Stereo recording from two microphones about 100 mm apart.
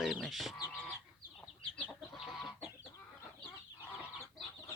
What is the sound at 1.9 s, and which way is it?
Chicken, centre (ahead or behind).